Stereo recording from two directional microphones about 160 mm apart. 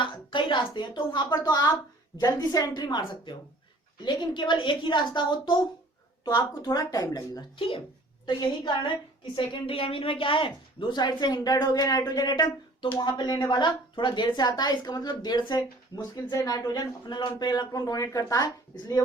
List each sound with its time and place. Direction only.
0.0 s a woman's voice: 30° left (ahead or behind)
4.0 s a woman's voice: 30° left (ahead or behind)